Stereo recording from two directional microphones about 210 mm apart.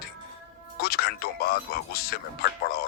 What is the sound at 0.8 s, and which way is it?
Speech, 45° left (ahead or behind).